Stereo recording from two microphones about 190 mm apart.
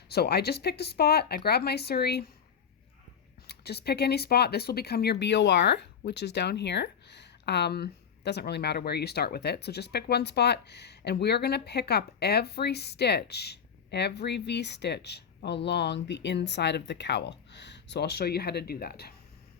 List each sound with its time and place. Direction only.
0.1 s speech: 55° left (ahead or behind)
3.4 s speech: 60° left (ahead or behind)